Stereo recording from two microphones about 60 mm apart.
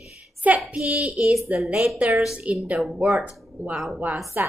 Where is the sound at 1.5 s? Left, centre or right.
Right.